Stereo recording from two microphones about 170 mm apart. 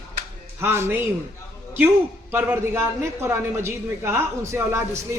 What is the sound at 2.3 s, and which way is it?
A man's voice, 15° right (ahead or behind).